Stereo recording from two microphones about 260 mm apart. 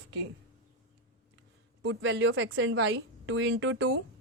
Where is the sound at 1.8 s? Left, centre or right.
Right.